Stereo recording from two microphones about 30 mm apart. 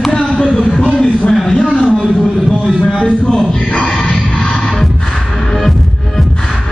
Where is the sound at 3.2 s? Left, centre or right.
Left.